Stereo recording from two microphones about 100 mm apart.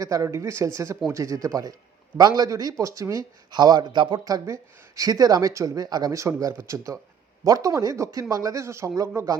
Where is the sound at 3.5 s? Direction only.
45° right (ahead or behind).